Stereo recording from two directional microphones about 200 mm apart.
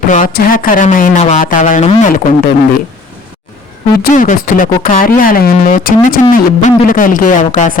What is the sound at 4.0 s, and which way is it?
Speech, 40° left (ahead or behind).